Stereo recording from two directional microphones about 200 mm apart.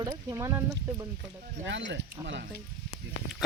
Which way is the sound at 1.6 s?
60° right (ahead or behind).